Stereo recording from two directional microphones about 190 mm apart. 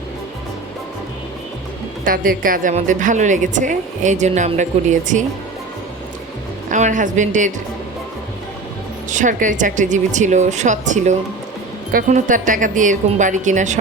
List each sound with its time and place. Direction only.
2.0 s a woman's voice: 45° right (ahead or behind)
6.7 s a woman's voice: 40° right (ahead or behind)
9.0 s a woman's voice: 40° right (ahead or behind)